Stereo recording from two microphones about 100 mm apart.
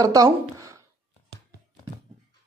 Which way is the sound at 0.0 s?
35° right (ahead or behind).